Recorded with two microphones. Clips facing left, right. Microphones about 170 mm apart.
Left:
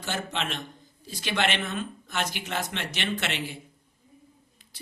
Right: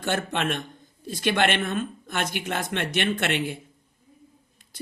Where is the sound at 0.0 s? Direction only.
55° right (ahead or behind).